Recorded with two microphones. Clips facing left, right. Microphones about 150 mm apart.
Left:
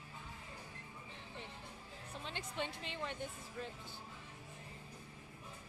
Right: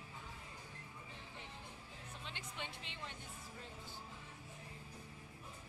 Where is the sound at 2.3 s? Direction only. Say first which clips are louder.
Left 8 dB; 35° left (ahead or behind).